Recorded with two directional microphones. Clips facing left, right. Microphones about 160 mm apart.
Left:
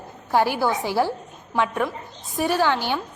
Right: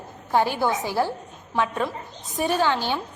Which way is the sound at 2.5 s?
15° right (ahead or behind).